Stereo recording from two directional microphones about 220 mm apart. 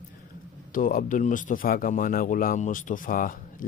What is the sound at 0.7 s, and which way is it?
Speech, 40° left (ahead or behind).